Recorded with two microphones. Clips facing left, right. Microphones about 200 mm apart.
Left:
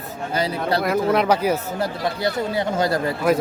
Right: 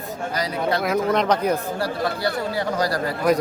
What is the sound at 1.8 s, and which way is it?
Speech, 20° left (ahead or behind).